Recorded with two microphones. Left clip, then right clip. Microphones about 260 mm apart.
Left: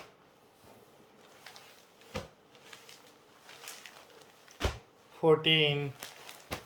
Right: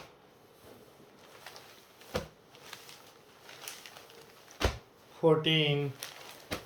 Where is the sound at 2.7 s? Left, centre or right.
Right.